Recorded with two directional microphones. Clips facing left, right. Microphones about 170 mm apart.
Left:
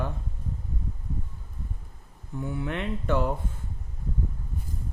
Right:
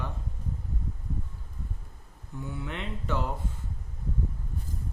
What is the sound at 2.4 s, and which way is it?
Speech, 55° left (ahead or behind).